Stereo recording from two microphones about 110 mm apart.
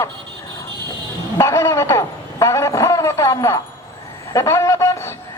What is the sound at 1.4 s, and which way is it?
A man's voice, 25° left (ahead or behind).